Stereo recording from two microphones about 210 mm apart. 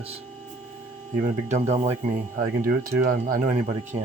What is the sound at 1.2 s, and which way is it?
Speech, 35° right (ahead or behind).